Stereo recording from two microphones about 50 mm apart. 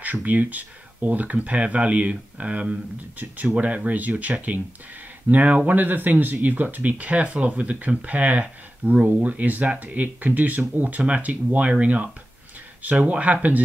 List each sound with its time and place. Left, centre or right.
0.0 s speech: right
3.2 s speech: right
12.8 s speech: right